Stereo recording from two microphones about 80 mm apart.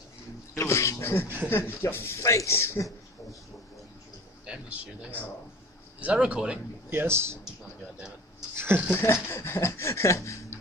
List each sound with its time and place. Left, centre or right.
0.6 s a sound: left
1.5 s speech: left
4.5 s a man's voice: centre
6.9 s speech: right
8.5 s speech: right
8.9 s speech: left